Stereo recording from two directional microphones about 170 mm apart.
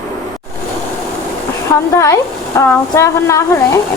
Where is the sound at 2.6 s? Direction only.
15° left (ahead or behind).